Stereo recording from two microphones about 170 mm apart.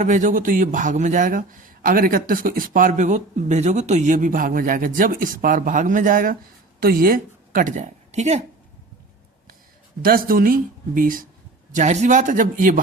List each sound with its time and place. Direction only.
0.0 s a man's voice: 45° right (ahead or behind)
10.0 s speech: 60° right (ahead or behind)
11.7 s a man's voice: 45° right (ahead or behind)